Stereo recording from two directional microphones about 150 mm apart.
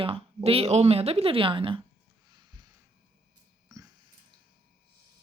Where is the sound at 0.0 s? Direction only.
40° right (ahead or behind).